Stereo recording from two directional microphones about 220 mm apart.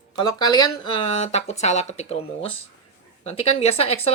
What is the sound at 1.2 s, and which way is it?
Speech, 30° left (ahead or behind).